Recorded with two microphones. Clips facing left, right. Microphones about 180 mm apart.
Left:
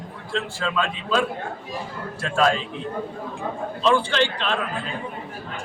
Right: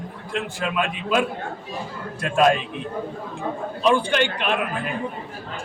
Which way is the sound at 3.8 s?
15° right (ahead or behind).